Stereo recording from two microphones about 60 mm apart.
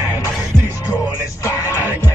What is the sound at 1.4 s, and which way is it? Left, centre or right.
Music, left.